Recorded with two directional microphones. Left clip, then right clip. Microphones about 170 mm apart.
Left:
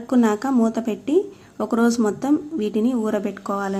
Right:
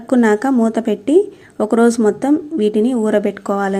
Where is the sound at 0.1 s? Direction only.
25° right (ahead or behind).